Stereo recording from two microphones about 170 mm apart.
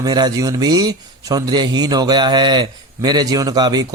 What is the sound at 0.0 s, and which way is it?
Speech, 25° right (ahead or behind).